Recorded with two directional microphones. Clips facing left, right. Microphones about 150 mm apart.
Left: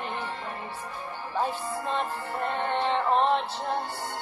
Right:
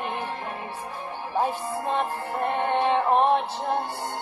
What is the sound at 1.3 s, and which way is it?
Music, 15° right (ahead or behind).